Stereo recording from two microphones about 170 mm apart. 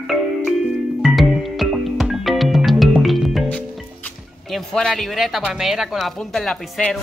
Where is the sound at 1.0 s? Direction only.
Centre (ahead or behind).